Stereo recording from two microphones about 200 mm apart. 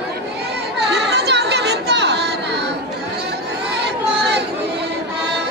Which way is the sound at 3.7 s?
55° right (ahead or behind).